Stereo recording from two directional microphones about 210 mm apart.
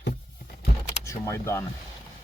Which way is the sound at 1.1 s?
15° left (ahead or behind).